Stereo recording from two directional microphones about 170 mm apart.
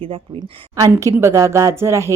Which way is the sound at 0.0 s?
35° right (ahead or behind).